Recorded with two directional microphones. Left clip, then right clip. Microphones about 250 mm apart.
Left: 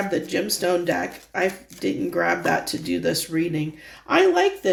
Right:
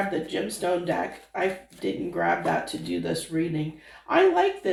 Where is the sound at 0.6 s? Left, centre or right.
Left.